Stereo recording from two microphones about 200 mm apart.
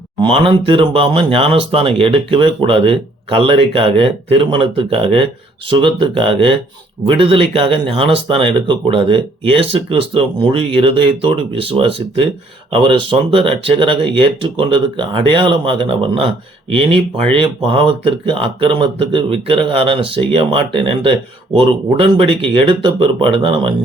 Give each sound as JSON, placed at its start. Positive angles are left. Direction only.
{"t": 0.2, "sound": "speech", "side_deg": -25}
{"t": 17.3, "sound": "speech", "side_deg": -25}